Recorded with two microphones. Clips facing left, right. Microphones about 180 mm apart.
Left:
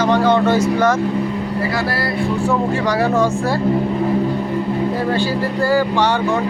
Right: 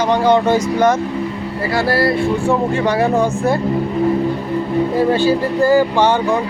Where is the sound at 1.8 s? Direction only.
25° right (ahead or behind).